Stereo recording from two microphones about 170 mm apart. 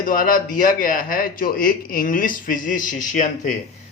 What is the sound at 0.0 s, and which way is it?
A man's voice, 55° left (ahead or behind).